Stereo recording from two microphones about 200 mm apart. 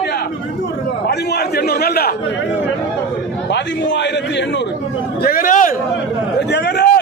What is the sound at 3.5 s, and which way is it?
A man's voice, 60° left (ahead or behind).